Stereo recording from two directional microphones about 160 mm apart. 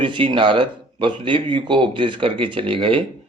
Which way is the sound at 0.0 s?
30° right (ahead or behind).